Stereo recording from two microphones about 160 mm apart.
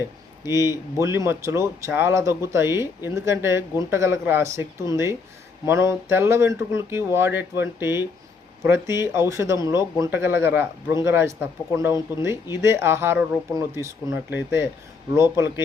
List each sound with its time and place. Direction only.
0.4 s speech: 15° right (ahead or behind)